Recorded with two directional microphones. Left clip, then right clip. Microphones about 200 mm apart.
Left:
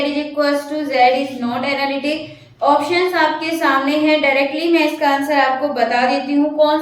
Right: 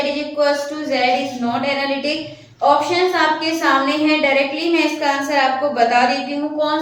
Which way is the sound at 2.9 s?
15° left (ahead or behind).